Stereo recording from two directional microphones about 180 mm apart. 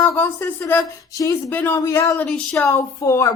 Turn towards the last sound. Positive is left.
turn(degrees=20)  # may be behind; listen again after turning